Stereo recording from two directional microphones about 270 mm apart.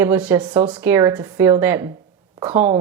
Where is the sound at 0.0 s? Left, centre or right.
Centre.